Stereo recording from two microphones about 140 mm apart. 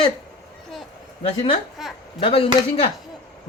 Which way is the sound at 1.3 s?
35° left (ahead or behind).